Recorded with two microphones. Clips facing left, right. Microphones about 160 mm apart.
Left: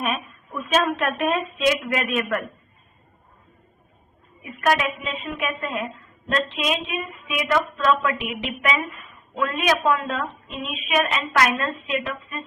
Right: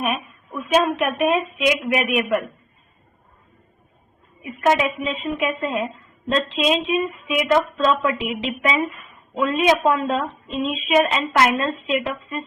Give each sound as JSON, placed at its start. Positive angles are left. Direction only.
{"t": 0.0, "sound": "a sound", "side_deg": -10}
{"t": 0.9, "sound": "a woman's voice", "side_deg": -15}
{"t": 4.4, "sound": "a woman's voice", "side_deg": -20}